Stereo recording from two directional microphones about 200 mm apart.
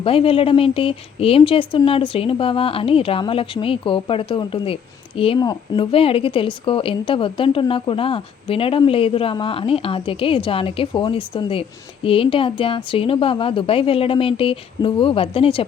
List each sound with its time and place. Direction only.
0.0 s a woman's voice: 25° left (ahead or behind)